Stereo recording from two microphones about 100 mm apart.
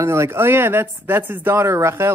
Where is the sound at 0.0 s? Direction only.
25° right (ahead or behind).